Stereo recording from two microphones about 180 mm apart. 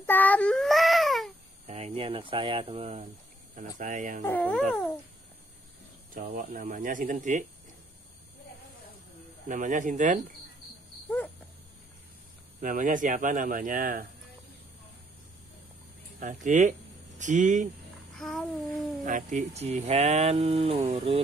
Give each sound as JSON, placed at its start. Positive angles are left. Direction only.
{"t": 0.0, "sound": "child singing", "side_deg": 10}
{"t": 1.7, "sound": "speech", "side_deg": -35}
{"t": 3.5, "sound": "speech", "side_deg": -45}
{"t": 4.2, "sound": "speech", "side_deg": 10}
{"t": 6.3, "sound": "speech", "side_deg": -50}
{"t": 9.5, "sound": "speech", "side_deg": -45}
{"t": 11.1, "sound": "a sound", "side_deg": 10}
{"t": 12.5, "sound": "speech", "side_deg": -45}
{"t": 16.2, "sound": "speech", "side_deg": -45}
{"t": 18.1, "sound": "child singing", "side_deg": 0}
{"t": 19.0, "sound": "speech", "side_deg": -45}